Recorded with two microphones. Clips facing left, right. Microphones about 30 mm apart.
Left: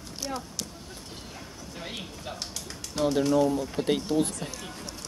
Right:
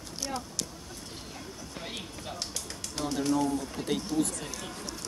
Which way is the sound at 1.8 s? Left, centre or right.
Centre.